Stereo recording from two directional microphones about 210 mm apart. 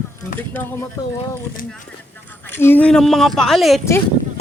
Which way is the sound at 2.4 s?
10° left (ahead or behind).